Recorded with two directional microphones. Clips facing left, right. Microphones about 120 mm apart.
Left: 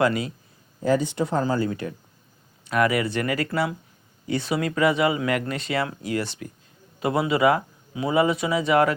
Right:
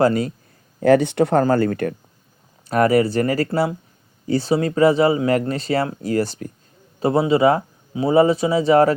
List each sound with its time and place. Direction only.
0.0 s speech: 40° right (ahead or behind)
0.8 s speech: 65° right (ahead or behind)
2.6 s speech: 40° right (ahead or behind)
7.0 s speech: 30° right (ahead or behind)